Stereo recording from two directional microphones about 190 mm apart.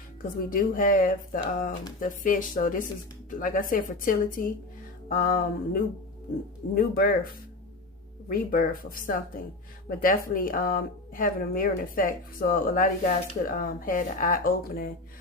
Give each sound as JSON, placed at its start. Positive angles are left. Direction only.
{"t": 0.2, "sound": "speech", "side_deg": 45}
{"t": 8.3, "sound": "speech", "side_deg": 50}